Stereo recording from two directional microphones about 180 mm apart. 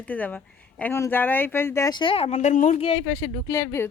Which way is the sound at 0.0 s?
10° left (ahead or behind).